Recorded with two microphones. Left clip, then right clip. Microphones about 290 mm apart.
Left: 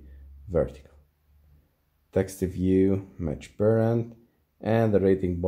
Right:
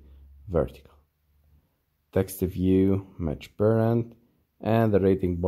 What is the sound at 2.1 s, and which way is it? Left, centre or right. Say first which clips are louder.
Speech: even; centre.